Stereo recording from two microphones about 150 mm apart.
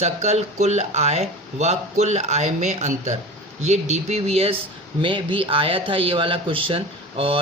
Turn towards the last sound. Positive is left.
turn(degrees=-35)  # may be behind; listen again after turning